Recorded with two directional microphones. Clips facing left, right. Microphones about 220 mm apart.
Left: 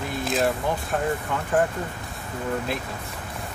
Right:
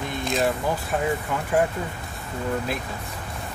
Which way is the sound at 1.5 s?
10° right (ahead or behind).